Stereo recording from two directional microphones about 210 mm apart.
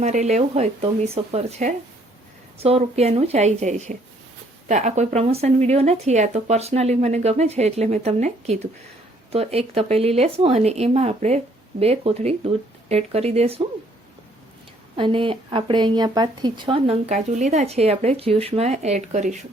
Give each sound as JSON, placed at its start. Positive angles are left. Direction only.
{"t": 0.0, "sound": "speech", "side_deg": -35}
{"t": 14.9, "sound": "speech", "side_deg": -25}